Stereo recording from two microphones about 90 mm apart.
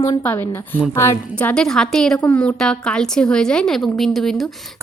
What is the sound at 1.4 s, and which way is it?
A woman's voice, 15° left (ahead or behind).